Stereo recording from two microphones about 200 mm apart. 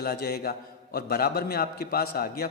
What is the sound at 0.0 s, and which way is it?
A man's voice, 50° left (ahead or behind).